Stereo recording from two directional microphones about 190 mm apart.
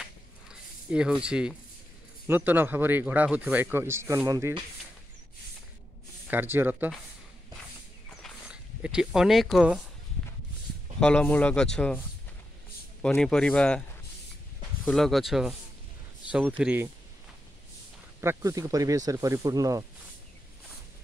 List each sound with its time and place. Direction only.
0.0 s a sound: 5° right (ahead or behind)
2.2 s a man's voice: 10° right (ahead or behind)
6.3 s a man's voice: 10° right (ahead or behind)
8.2 s a sound: 5° right (ahead or behind)
11.0 s speech: 5° left (ahead or behind)
13.0 s speech: 5° left (ahead or behind)
14.9 s a man's voice: centre (ahead or behind)
18.2 s a man's voice: 15° right (ahead or behind)